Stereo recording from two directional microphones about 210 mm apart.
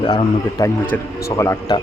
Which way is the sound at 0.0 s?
20° left (ahead or behind).